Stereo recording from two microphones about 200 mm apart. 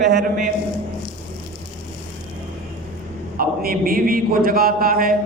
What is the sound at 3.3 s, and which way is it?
A man's voice, 45° right (ahead or behind).